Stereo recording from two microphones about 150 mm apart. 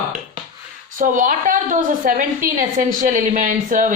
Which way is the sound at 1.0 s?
60° right (ahead or behind).